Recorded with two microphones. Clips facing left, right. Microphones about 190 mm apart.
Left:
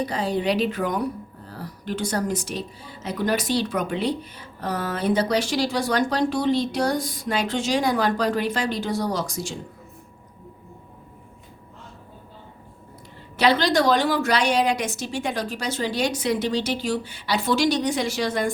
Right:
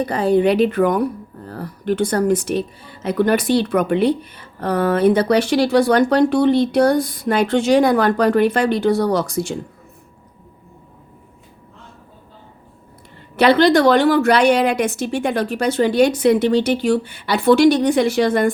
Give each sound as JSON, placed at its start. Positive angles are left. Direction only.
{"t": 0.0, "sound": "speech", "side_deg": -55}
{"t": 13.3, "sound": "speech", "side_deg": -60}